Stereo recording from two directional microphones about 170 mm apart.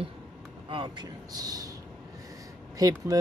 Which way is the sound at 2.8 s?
20° right (ahead or behind).